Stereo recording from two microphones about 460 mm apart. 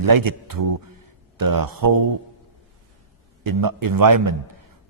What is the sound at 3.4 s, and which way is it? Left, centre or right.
A man's voice, right.